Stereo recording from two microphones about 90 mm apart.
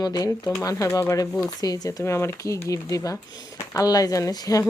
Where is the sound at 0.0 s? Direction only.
45° left (ahead or behind).